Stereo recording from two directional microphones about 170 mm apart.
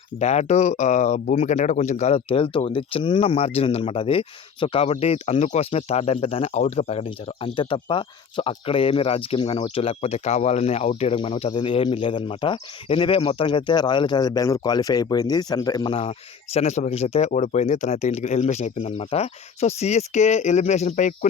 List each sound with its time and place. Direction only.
0.2 s speech: 40° left (ahead or behind)